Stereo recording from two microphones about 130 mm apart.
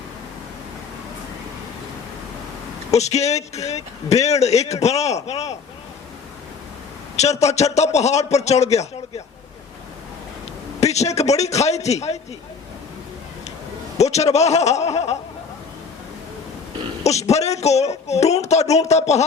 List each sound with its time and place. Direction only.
2.9 s speech: 55° left (ahead or behind)
7.2 s speech: 60° left (ahead or behind)
10.8 s a sound: 55° left (ahead or behind)
11.2 s speech: 55° left (ahead or behind)
14.0 s speech: 55° left (ahead or behind)
17.0 s speech: 55° left (ahead or behind)